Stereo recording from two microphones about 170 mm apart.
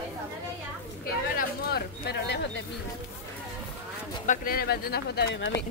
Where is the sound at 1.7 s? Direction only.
70° left (ahead or behind).